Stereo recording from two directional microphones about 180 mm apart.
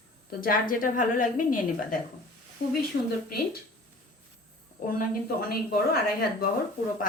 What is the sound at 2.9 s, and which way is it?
Speech, 90° left.